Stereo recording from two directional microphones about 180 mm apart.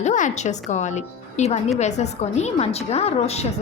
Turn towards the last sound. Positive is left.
turn(degrees=35)  # may be behind; listen again after turning